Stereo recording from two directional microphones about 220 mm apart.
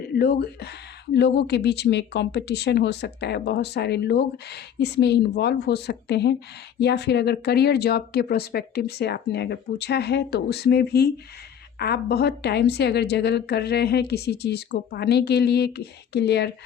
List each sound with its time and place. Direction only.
0.2 s speech: 45° left (ahead or behind)